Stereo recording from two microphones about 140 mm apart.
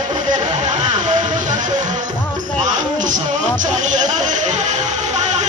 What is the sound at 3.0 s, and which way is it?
Music, 65° right (ahead or behind).